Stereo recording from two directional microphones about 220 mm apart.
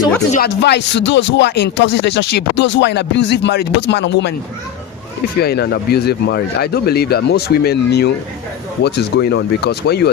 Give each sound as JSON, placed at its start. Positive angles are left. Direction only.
{"t": 0.3, "sound": "speech", "side_deg": 50}
{"t": 5.4, "sound": "speech", "side_deg": 45}